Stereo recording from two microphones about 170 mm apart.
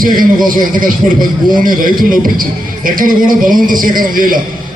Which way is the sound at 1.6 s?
55° right (ahead or behind).